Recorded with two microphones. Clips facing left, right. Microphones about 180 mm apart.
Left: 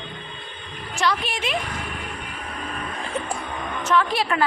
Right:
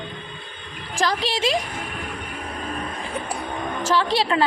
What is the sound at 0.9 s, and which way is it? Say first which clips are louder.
Speech: right 1 dB; 90° right.